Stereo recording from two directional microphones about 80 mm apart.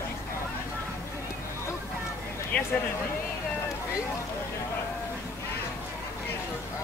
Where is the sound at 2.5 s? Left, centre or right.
Centre.